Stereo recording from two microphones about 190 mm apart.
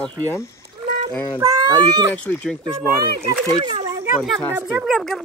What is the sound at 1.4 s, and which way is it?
Speech, 20° right (ahead or behind).